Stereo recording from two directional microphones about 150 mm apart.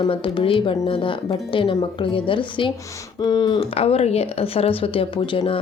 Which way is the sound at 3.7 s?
40° left (ahead or behind).